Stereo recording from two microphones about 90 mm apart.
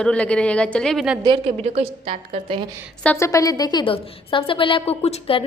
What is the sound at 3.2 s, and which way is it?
Speech, 40° left (ahead or behind).